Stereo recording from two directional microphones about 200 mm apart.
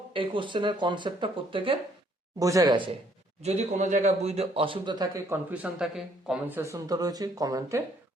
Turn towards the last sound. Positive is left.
turn(degrees=-15)  # may be behind; listen again after turning